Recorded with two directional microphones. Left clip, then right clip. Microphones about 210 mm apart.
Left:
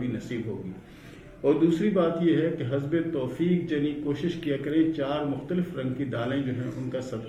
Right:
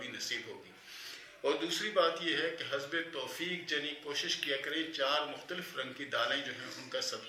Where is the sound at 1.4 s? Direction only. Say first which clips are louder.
Left 10 dB; 10° right (ahead or behind).